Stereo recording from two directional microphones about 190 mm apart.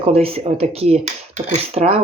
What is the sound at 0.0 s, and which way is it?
Speech, 30° right (ahead or behind).